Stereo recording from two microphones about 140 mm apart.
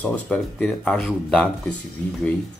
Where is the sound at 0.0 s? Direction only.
10° left (ahead or behind).